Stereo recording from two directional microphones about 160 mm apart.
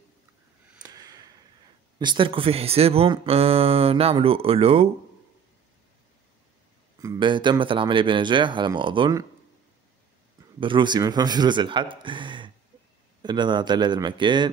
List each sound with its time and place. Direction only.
0.8 s a sound: 25° right (ahead or behind)
2.0 s speech: 30° right (ahead or behind)
7.0 s speech: 25° right (ahead or behind)
10.6 s speech: 30° right (ahead or behind)